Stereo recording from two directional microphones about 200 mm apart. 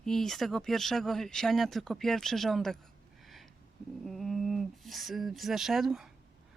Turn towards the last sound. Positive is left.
turn(degrees=0)  # may be behind; listen again after turning